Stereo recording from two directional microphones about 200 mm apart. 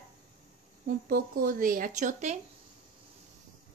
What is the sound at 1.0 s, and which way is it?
A woman's voice, 45° right (ahead or behind).